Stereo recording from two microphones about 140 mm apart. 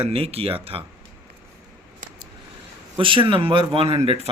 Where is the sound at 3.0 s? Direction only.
35° right (ahead or behind).